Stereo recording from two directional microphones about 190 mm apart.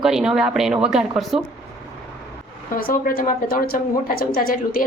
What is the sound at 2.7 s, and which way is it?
A woman's voice, 50° left (ahead or behind).